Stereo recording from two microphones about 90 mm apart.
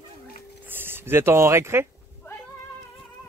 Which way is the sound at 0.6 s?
25° right (ahead or behind).